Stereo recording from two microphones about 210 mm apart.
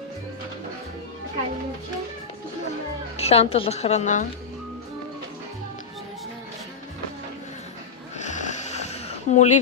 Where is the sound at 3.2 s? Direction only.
30° left (ahead or behind).